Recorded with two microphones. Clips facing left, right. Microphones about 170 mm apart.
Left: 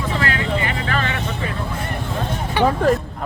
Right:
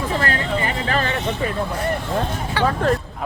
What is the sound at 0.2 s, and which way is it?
Vehicle, 40° right (ahead or behind).